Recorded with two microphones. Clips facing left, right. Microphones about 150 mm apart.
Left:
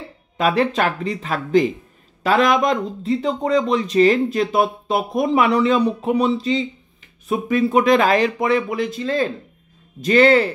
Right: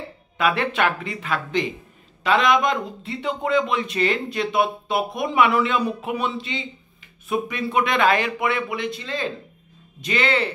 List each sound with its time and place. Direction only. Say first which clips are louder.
0.4 s speech: left 3 dB; 35° left (ahead or behind)